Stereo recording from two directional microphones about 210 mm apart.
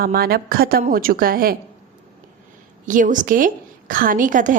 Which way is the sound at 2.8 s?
40° right (ahead or behind).